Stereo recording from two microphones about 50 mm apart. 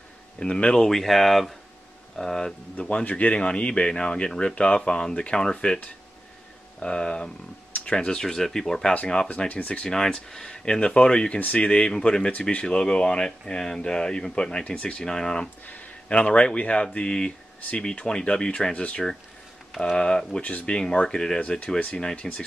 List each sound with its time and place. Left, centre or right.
0.4 s speech: centre
6.8 s speech: centre
9.5 s speech: left
9.8 s speech: centre
20.4 s speech: left
20.7 s speech: centre
21.4 s speech: left
22.2 s speech: centre